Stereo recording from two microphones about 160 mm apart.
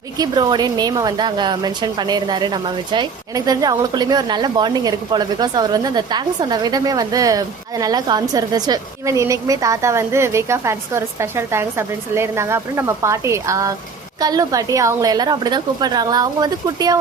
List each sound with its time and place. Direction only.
0.2 s a woman's voice: 25° right (ahead or behind)